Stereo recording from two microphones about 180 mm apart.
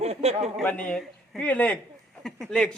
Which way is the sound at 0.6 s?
10° left (ahead or behind).